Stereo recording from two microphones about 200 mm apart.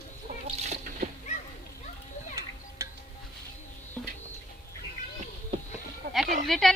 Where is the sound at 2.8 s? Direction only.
15° right (ahead or behind).